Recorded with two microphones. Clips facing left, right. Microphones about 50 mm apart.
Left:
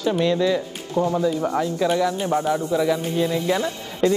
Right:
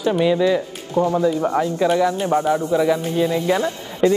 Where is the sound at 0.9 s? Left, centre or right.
Right.